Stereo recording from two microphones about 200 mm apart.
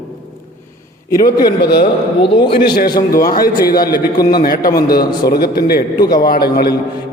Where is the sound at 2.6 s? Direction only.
50° left (ahead or behind).